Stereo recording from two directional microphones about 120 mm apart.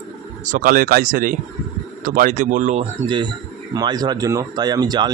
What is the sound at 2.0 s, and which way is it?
Speech, 90° right.